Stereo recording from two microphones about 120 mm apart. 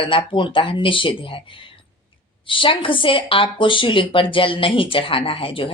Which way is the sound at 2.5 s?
45° left (ahead or behind).